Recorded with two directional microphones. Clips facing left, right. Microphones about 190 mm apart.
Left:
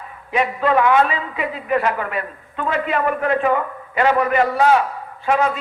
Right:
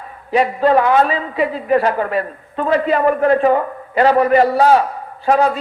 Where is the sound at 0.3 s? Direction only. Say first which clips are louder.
Right 5 dB; 35° right (ahead or behind).